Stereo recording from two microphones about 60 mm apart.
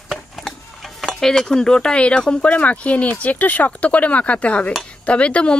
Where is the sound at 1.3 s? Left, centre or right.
Centre.